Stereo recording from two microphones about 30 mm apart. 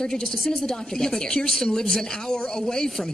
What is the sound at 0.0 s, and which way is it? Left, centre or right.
A woman's voice, centre.